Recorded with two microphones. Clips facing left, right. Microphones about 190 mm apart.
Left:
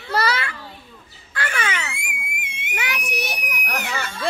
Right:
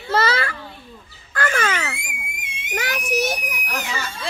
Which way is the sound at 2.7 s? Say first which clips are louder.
Right 4 dB; 40° right (ahead or behind).